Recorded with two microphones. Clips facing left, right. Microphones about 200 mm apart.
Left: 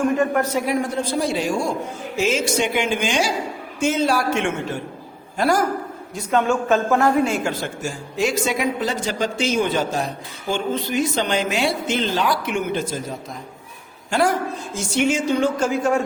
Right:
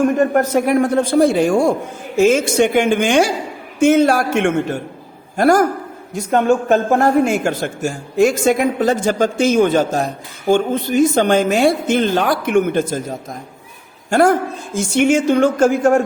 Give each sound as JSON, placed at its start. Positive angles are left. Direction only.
{"t": 0.2, "sound": "a man's voice", "side_deg": -45}